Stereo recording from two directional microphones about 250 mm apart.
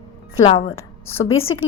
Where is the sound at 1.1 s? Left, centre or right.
Left.